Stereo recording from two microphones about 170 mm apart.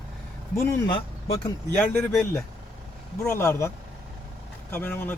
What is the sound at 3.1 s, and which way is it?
Speech, 15° left (ahead or behind).